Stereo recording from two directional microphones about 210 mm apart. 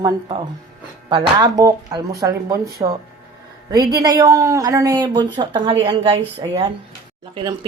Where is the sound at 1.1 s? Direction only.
20° right (ahead or behind).